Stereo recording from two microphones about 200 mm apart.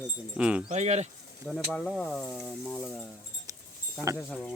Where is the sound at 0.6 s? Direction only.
35° right (ahead or behind).